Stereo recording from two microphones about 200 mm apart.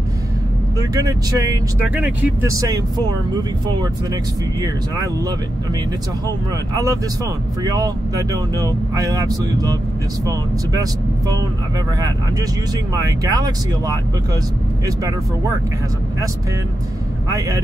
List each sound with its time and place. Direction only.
0.7 s speech: 20° right (ahead or behind)
2.0 s speech: 5° right (ahead or behind)
2.5 s speech: 20° right (ahead or behind)
12.9 s speech: 20° right (ahead or behind)